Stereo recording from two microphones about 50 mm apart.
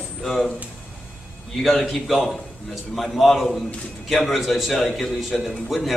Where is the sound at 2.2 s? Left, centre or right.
Centre.